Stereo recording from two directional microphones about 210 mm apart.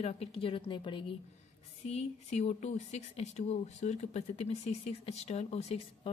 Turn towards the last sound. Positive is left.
turn(degrees=30)  # may be behind; listen again after turning